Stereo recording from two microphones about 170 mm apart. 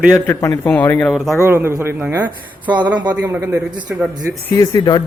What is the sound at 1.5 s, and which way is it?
Speech, 15° right (ahead or behind).